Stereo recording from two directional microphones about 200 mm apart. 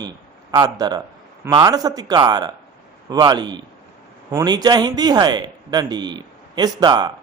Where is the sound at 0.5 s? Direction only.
20° right (ahead or behind).